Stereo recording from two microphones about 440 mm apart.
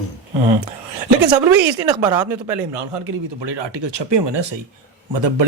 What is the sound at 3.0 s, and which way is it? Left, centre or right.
Speech, right.